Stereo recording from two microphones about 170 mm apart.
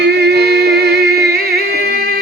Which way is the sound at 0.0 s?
75° right (ahead or behind).